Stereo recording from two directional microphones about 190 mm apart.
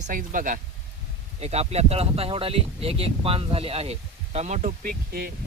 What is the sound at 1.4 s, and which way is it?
Speech, 35° right (ahead or behind).